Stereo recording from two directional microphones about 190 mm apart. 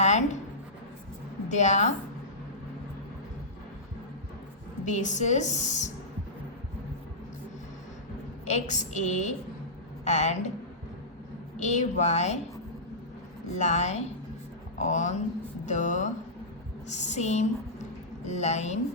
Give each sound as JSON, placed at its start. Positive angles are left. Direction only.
{"t": 0.0, "sound": "writing", "side_deg": 35}
{"t": 1.5, "sound": "a woman's voice", "side_deg": 40}
{"t": 4.9, "sound": "a woman's voice", "side_deg": 40}
{"t": 8.4, "sound": "a woman's voice", "side_deg": 40}
{"t": 11.5, "sound": "a woman's voice", "side_deg": 40}
{"t": 13.6, "sound": "a woman's voice", "side_deg": 40}